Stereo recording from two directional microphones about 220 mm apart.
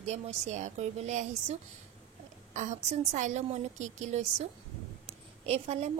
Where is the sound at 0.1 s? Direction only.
30° right (ahead or behind).